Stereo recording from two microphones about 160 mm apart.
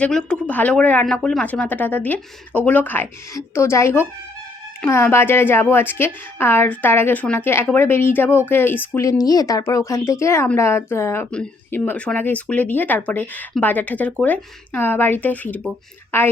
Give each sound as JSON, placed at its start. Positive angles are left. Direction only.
{"t": 0.0, "sound": "a woman's voice", "side_deg": 5}